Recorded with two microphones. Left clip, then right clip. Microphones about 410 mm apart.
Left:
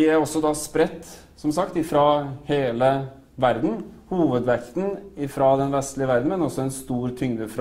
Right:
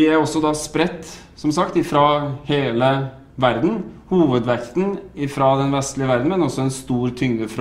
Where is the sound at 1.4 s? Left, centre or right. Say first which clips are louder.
Right 5 dB; centre.